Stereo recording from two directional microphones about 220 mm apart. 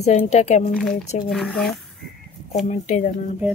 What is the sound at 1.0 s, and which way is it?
Speech, 30° left (ahead or behind).